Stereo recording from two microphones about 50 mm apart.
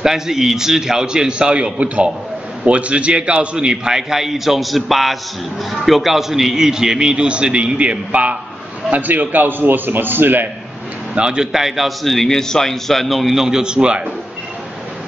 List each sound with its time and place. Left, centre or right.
0.0 s a man's voice: centre; by 10.5 s right
11.1 s a man's voice: centre